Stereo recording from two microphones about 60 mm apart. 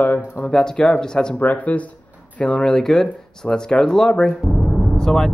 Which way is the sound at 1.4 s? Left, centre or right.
Left.